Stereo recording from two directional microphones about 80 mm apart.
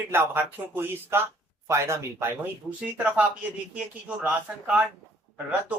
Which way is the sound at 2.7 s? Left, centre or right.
Centre.